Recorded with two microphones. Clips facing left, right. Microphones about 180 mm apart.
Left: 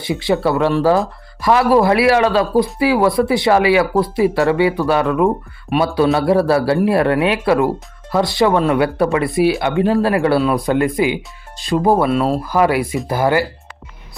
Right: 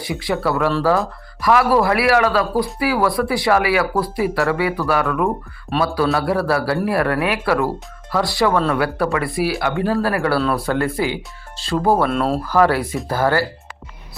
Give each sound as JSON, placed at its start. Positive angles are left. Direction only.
{"t": 0.0, "sound": "speech", "side_deg": 25}
{"t": 12.0, "sound": "speech", "side_deg": 5}